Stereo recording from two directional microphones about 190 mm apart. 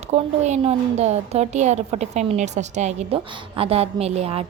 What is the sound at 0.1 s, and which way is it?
A woman's voice, 35° right (ahead or behind).